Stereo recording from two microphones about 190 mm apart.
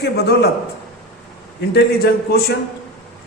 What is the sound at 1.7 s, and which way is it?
Speech, 55° left (ahead or behind).